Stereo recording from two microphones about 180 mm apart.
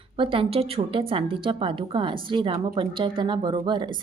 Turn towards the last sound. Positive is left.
turn(degrees=-25)  # may be behind; listen again after turning